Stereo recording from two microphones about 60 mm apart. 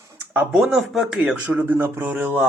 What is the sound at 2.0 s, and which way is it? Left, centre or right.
Speech, right.